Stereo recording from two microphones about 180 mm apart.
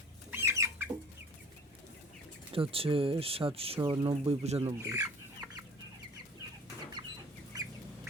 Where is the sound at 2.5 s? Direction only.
30° right (ahead or behind).